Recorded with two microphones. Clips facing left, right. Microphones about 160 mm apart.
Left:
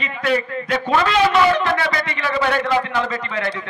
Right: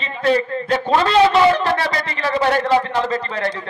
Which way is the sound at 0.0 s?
30° right (ahead or behind).